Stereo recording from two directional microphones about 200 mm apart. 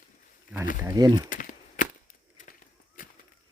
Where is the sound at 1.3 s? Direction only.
40° left (ahead or behind).